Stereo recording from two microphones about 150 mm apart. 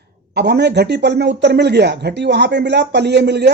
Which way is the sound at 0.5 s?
90° right.